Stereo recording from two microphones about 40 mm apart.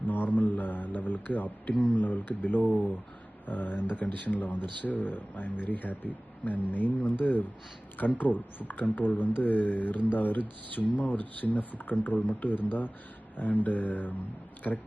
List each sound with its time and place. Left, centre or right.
0.1 s mantra: left
2.0 s speech: left